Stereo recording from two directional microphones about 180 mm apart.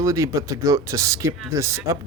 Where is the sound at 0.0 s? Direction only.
15° right (ahead or behind).